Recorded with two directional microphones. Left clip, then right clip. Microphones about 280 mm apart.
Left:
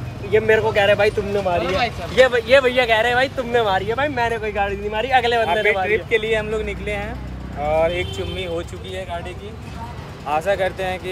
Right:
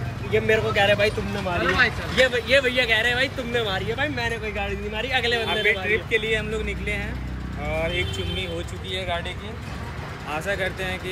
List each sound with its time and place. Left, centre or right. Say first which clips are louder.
0.7 s speech: left 4 dB; centre
1.3 s speech: left 7 dB; left
1.6 s speech: even; centre
2.4 s speech: left 5 dB; centre
5.5 s speech: left 4 dB; centre
7.6 s speech: left 9 dB; left
7.9 s speech: left 2 dB; centre
10.3 s speech: left 7 dB; centre